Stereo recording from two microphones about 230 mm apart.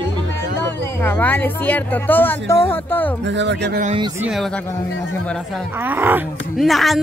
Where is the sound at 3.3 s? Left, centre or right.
Right.